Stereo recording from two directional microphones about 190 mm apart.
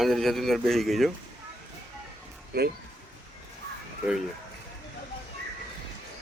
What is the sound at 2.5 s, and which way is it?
Speech, 55° right (ahead or behind).